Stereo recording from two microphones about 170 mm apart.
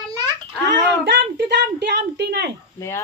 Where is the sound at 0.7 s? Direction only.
90° right; by 2.5 s 75° right (ahead or behind).